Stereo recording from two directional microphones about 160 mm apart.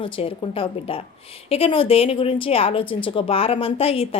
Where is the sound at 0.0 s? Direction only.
35° left (ahead or behind).